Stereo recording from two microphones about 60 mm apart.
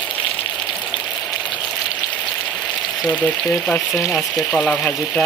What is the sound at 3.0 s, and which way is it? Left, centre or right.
Speech, left.